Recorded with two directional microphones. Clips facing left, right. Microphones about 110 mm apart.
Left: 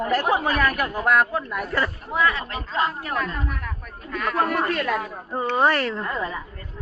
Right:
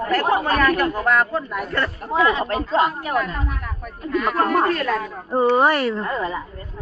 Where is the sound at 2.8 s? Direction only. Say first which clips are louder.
Right 3 dB; 15° right (ahead or behind).